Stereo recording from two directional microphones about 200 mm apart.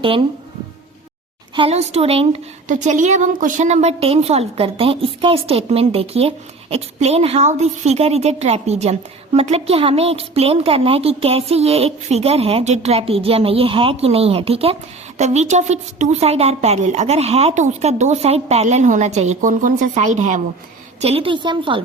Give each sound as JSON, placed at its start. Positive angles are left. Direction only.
{"t": 0.0, "sound": "a woman's voice", "side_deg": -25}
{"t": 1.5, "sound": "a woman's voice", "side_deg": -30}